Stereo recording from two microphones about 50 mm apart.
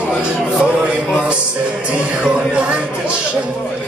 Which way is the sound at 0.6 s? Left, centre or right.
Centre.